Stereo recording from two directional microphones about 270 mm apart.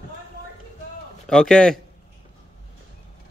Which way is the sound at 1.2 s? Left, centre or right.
Centre.